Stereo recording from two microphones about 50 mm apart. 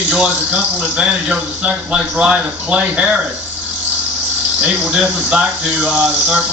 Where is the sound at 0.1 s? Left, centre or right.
Right.